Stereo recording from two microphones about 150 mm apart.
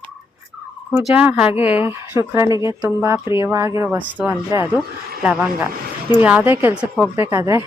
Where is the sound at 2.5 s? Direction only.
30° left (ahead or behind).